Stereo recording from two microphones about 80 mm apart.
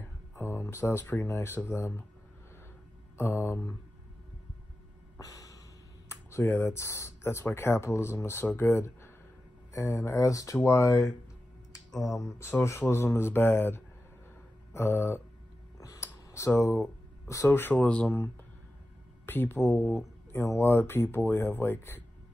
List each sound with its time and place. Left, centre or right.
0.4 s speech: left
3.2 s speech: left
5.2 s snort: left
6.0 s speech: left
12.2 s speech: left
15.8 s a sound: left
17.5 s speech: left
19.2 s speech: left